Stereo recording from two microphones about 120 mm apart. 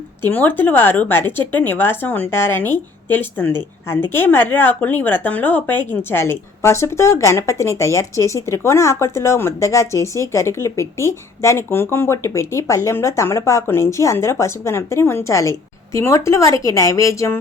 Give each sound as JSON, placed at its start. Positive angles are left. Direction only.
{"t": 0.2, "sound": "speech", "side_deg": 15}